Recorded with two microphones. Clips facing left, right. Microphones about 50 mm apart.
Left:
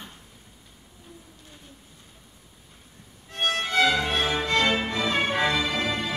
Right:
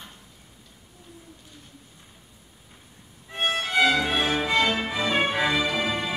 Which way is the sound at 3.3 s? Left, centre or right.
Centre.